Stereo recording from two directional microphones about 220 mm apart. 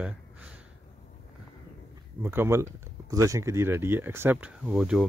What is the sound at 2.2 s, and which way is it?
Speech, 10° right (ahead or behind).